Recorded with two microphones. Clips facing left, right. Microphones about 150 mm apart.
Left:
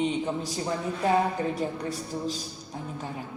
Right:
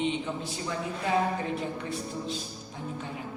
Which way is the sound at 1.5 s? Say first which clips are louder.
Left 2 dB; 40° left (ahead or behind).